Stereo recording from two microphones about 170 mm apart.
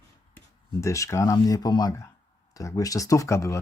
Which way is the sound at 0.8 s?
20° left (ahead or behind).